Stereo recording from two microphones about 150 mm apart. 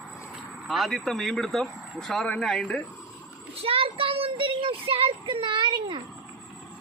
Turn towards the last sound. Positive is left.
turn(degrees=-30)  # may be behind; listen again after turning